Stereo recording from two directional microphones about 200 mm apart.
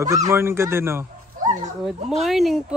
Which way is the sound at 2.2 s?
Centre (ahead or behind).